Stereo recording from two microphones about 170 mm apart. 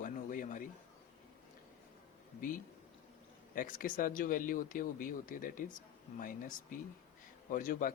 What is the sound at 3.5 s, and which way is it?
Speech, 55° left (ahead or behind).